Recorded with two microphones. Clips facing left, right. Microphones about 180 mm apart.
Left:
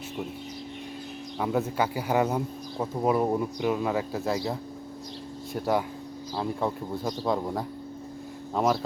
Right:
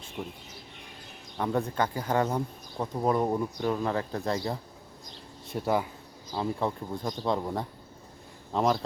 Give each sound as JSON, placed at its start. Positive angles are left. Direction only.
{"t": 1.4, "sound": "speech", "side_deg": 5}
{"t": 5.5, "sound": "speech", "side_deg": 0}